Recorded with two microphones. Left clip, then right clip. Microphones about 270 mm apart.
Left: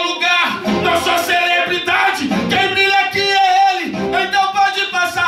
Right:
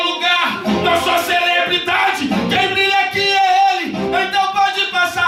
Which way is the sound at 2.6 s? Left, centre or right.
Centre.